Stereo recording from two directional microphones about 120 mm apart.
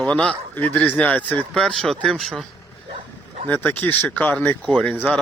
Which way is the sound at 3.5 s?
15° left (ahead or behind).